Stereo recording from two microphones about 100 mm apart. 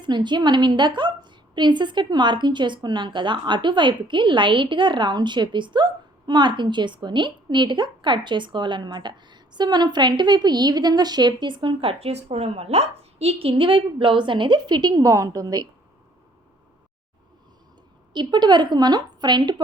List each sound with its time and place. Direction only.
0.0 s a woman's voice: 50° right (ahead or behind)
18.1 s a woman's voice: 50° right (ahead or behind)